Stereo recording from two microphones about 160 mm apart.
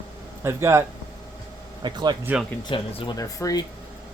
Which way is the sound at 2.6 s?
35° left (ahead or behind).